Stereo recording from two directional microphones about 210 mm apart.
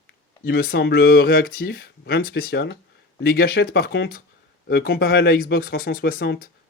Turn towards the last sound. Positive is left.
turn(degrees=50)  # may be behind; listen again after turning